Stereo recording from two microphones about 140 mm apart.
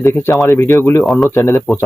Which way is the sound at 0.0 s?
20° left (ahead or behind).